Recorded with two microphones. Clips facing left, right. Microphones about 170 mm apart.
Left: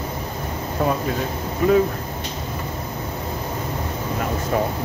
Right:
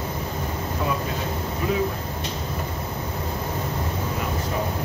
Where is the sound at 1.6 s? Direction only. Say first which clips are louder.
Left 9 dB; 50° left (ahead or behind).